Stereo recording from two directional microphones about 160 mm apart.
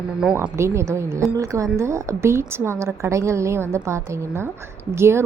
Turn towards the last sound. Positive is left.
turn(degrees=-15)  # may be behind; listen again after turning